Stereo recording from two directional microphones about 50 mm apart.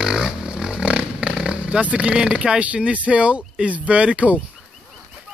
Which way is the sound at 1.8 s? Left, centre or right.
Right.